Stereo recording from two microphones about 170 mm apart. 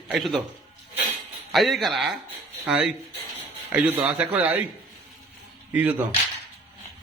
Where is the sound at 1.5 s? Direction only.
Centre (ahead or behind).